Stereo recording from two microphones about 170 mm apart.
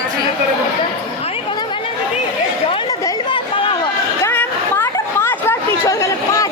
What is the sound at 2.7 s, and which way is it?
Chatter, 25° left (ahead or behind).